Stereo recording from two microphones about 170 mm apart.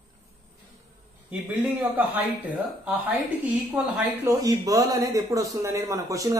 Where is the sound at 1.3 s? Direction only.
10° right (ahead or behind).